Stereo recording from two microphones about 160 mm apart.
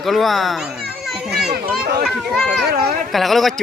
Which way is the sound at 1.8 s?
75° right (ahead or behind).